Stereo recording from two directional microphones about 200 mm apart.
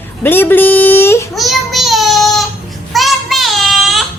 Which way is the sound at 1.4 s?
Centre (ahead or behind).